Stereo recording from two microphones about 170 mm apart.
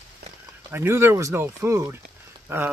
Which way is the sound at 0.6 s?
15° right (ahead or behind).